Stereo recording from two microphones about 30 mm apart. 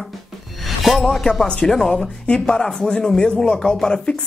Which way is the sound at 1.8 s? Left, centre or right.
Centre.